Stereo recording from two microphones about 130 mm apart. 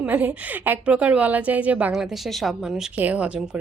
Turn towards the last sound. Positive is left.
turn(degrees=-10)  # may be behind; listen again after turning